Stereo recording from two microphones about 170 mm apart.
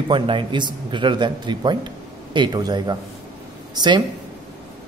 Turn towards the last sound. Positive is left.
turn(degrees=-25)  # may be behind; listen again after turning